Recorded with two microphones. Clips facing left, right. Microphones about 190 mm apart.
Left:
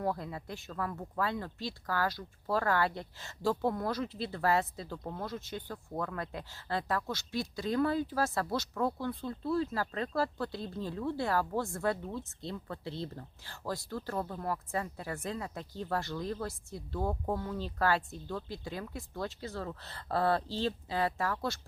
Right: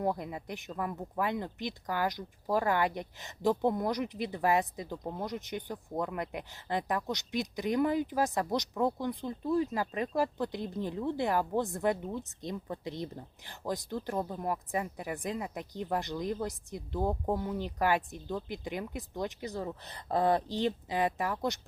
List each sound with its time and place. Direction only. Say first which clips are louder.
0.0 s speech: right 2 dB; 20° right (ahead or behind)